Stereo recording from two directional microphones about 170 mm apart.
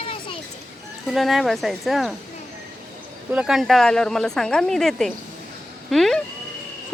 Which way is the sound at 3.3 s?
Centre (ahead or behind).